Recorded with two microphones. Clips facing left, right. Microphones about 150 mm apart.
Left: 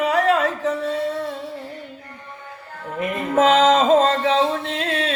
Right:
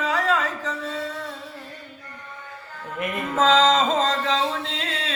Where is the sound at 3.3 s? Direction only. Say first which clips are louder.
Left 3 dB; 60° left (ahead or behind).